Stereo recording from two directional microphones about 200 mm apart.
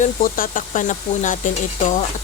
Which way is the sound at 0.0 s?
45° left (ahead or behind).